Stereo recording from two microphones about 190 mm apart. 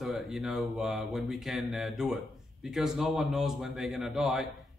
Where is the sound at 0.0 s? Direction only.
Centre (ahead or behind).